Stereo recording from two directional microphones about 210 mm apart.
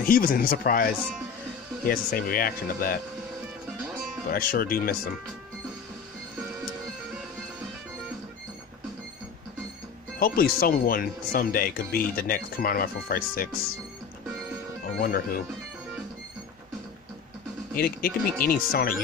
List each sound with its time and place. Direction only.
0.0 s speech: 40° left (ahead or behind)
1.9 s speech: 45° left (ahead or behind)
4.3 s speech: 45° left (ahead or behind)
10.1 s speech: 45° left (ahead or behind)
15.0 s speech: 45° left (ahead or behind)
17.7 s speech: 45° left (ahead or behind)